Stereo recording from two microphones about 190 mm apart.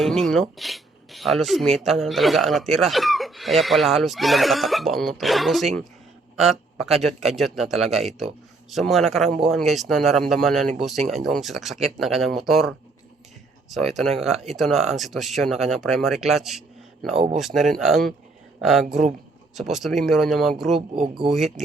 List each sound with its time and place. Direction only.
0.0 s speech: centre (ahead or behind)
20.9 s speech: 30° right (ahead or behind)
21.2 s speech: centre (ahead or behind)